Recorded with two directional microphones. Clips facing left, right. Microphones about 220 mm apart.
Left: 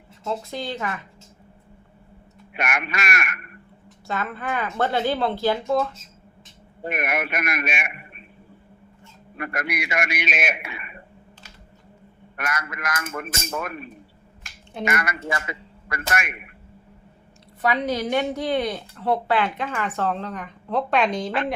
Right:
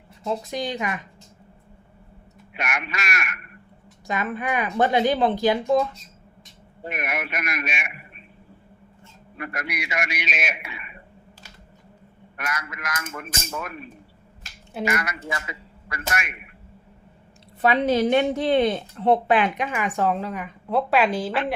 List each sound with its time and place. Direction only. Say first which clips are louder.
0.3 s a woman's voice: right 2 dB; 15° right (ahead or behind)
2.5 s a man's voice: left 3 dB; 55° left (ahead or behind)
4.0 s a woman's voice: right 2 dB; 15° right (ahead or behind)
6.8 s a man's voice: left 4 dB; 55° left (ahead or behind)
9.4 s a man's voice: left 3 dB; 55° left (ahead or behind)
12.4 s a man's voice: left 2 dB; 50° left (ahead or behind)
14.8 s a man's voice: left 1 dB; 50° left (ahead or behind)
17.6 s a woman's voice: right 4 dB; 25° right (ahead or behind); by 21.4 s 5° right (ahead or behind)